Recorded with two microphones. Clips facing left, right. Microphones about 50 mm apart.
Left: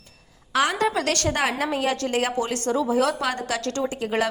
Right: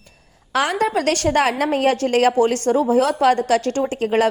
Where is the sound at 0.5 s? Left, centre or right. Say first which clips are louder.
Right 3 dB; right.